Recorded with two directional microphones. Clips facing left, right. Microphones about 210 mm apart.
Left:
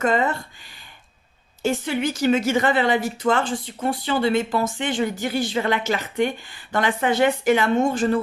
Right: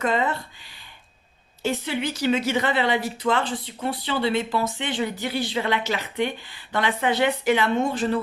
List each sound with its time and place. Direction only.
0.0 s a woman's voice: 45° left (ahead or behind)
1.6 s a woman's voice: 45° left (ahead or behind)